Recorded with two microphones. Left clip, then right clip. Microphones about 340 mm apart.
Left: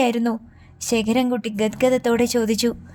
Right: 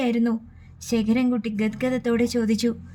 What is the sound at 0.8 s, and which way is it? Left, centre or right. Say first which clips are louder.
Speech: left 3 dB; left.